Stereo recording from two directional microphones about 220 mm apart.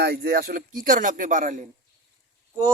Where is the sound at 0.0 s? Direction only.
45° right (ahead or behind).